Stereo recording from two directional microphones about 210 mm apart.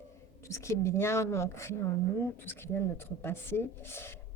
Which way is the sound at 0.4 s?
15° left (ahead or behind).